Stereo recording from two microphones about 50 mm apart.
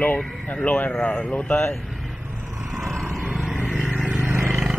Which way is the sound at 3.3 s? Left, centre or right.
Centre.